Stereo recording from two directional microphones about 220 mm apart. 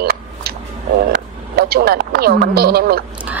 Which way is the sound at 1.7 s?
45° right (ahead or behind).